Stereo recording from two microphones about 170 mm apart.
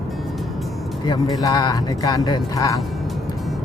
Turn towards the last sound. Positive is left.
turn(degrees=20)  # may be behind; listen again after turning